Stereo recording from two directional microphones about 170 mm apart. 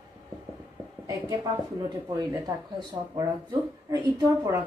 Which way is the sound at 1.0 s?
20° right (ahead or behind).